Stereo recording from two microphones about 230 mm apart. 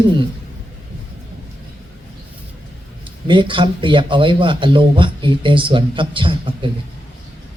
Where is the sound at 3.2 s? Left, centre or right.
Right.